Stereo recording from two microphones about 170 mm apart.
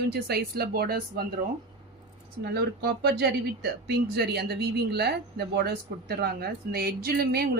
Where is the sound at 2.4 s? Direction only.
75° right (ahead or behind).